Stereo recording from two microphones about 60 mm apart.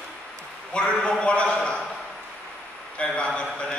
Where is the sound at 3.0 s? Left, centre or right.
Centre.